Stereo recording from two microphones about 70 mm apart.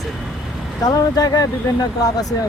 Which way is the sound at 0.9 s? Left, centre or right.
Left.